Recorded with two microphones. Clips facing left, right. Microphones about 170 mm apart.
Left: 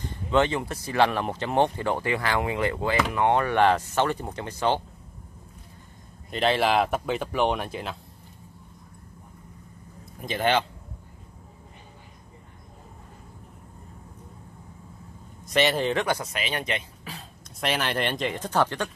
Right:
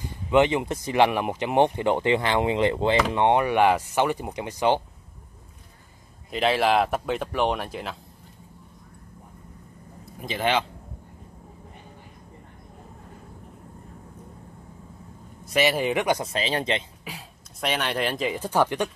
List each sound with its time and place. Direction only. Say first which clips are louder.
0.0 s speech: right 3 dB; 15° right (ahead or behind)
6.3 s speech: right 1 dB; centre (ahead or behind)
10.2 s speech: left 1 dB; centre (ahead or behind)
15.4 s speech: right 1 dB; 5° right (ahead or behind)
16.2 s speech: right 4 dB; 30° right (ahead or behind)
17.6 s speech: even; centre (ahead or behind)